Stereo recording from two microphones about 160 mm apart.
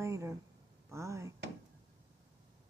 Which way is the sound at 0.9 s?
20° right (ahead or behind).